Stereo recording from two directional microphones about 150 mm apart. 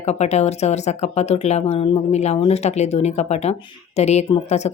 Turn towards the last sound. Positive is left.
turn(degrees=45)  # may be behind; listen again after turning